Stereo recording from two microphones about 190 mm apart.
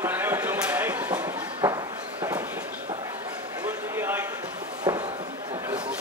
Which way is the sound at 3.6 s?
10° right (ahead or behind).